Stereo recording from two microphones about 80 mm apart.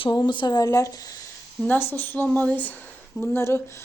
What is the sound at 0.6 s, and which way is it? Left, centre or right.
Speech, left.